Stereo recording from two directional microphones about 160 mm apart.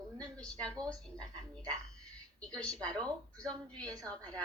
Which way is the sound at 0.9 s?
5° left (ahead or behind).